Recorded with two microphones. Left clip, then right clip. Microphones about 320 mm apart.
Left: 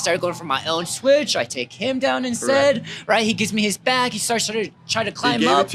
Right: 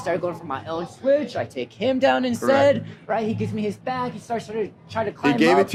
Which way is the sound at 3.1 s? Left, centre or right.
Left.